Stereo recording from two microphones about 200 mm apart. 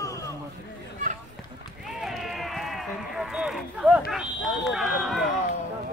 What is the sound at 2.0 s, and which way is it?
Run, centre (ahead or behind).